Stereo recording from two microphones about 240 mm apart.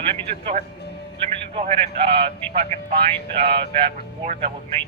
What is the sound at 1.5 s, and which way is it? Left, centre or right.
Speech, right.